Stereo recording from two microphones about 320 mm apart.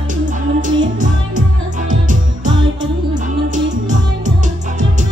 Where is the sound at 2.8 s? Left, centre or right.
Centre.